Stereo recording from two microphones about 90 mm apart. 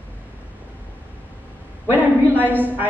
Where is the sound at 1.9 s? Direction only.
20° right (ahead or behind).